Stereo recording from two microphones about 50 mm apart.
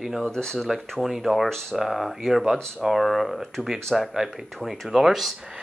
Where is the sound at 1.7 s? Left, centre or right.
Centre.